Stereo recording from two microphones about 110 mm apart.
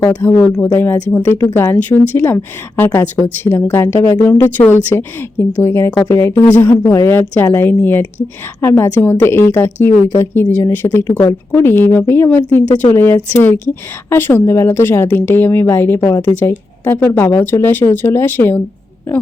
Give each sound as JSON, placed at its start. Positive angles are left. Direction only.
{"t": 0.1, "sound": "a woman's voice", "side_deg": 15}